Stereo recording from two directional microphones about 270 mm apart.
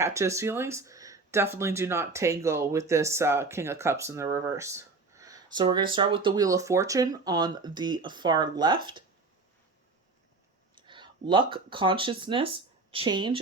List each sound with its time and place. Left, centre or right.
0.0 s speech: centre
10.8 s speech: centre